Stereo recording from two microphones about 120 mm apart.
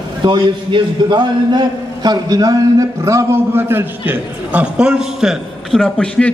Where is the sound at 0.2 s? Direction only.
40° right (ahead or behind).